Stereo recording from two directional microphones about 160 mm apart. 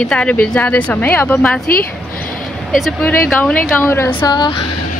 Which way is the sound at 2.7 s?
Centre (ahead or behind).